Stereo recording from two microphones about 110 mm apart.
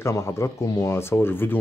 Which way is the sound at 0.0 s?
25° left (ahead or behind).